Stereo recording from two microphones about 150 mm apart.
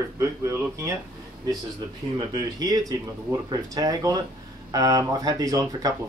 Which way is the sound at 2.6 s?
25° right (ahead or behind).